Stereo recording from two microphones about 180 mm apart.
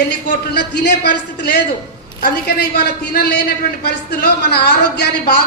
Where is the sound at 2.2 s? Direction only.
60° left (ahead or behind).